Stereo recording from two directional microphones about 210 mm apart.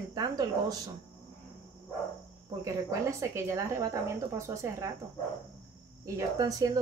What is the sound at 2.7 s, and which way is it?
Speech, 15° right (ahead or behind).